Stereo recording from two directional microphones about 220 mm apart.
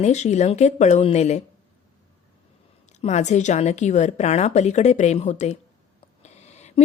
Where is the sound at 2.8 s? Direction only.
30° left (ahead or behind).